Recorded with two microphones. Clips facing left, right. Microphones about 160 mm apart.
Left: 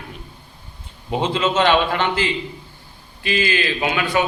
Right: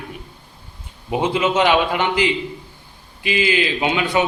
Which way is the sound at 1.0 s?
15° right (ahead or behind).